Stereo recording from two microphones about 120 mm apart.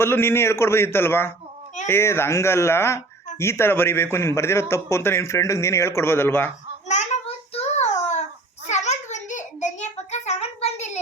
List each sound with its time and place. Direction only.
0.0 s speech: 20° left (ahead or behind)
6.8 s child singing: 75° left (ahead or behind)
8.6 s a sound: 75° left (ahead or behind)